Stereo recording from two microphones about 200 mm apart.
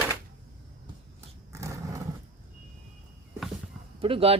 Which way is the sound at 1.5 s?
15° right (ahead or behind).